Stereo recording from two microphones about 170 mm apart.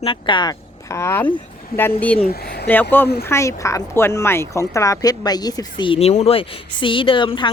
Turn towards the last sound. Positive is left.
turn(degrees=30)  # may be behind; listen again after turning